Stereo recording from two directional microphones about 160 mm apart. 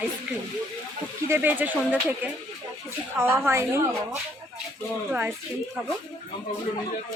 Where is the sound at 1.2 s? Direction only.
15° right (ahead or behind).